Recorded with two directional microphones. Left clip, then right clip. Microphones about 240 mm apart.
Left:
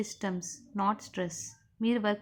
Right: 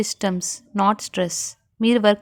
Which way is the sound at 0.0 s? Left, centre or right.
Right.